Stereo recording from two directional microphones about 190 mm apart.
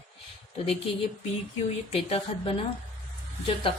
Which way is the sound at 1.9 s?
30° left (ahead or behind).